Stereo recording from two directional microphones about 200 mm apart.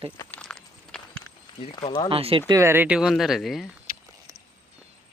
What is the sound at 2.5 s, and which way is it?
Speech, 15° right (ahead or behind).